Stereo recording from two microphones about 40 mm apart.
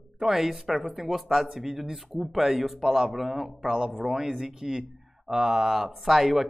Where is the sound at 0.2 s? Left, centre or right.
Centre.